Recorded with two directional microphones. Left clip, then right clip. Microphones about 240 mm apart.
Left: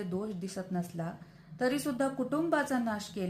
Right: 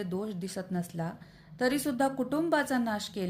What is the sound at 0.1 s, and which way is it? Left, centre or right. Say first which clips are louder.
A woman's voice: right 2 dB; right.